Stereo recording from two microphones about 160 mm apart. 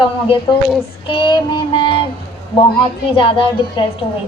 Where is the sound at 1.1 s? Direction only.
30° left (ahead or behind).